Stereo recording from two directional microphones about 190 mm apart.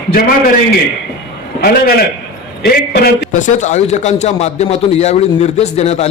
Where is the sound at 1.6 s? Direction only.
50° left (ahead or behind).